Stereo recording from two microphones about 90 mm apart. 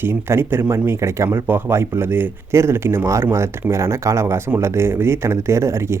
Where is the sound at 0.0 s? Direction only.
25° right (ahead or behind).